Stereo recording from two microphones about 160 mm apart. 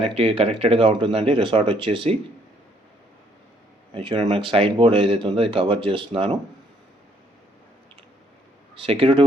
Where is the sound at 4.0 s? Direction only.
35° right (ahead or behind).